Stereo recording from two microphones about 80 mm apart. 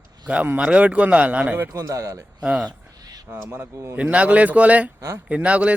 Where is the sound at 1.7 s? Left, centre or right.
Right.